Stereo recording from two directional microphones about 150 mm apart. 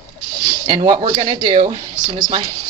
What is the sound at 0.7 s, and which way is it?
Speech, 30° right (ahead or behind).